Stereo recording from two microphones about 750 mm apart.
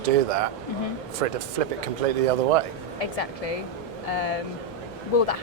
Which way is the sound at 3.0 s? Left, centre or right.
Left.